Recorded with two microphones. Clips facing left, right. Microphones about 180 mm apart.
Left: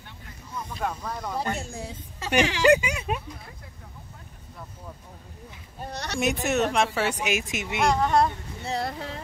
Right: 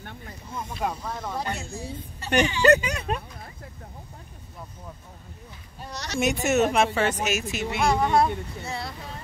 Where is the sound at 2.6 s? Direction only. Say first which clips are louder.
Even; 10° left (ahead or behind).